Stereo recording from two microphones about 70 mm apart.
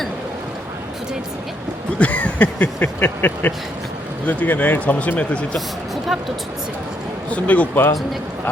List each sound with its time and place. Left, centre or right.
2.0 s speech: left
7.3 s speech: left